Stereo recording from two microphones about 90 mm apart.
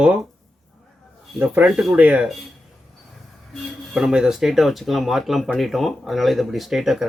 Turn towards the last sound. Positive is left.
turn(degrees=-5)  # may be behind; listen again after turning